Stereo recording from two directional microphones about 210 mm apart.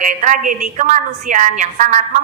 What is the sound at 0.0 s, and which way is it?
A woman's voice, 35° right (ahead or behind).